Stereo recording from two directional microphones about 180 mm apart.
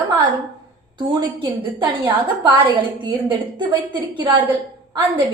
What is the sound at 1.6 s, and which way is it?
A woman's voice, 10° right (ahead or behind).